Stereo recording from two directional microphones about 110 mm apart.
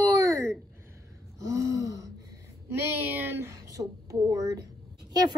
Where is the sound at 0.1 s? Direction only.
30° right (ahead or behind).